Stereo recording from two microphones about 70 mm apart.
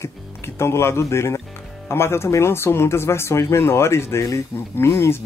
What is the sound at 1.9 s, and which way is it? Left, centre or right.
Speech, left.